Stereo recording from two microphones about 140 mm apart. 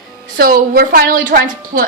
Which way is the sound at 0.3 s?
90° right.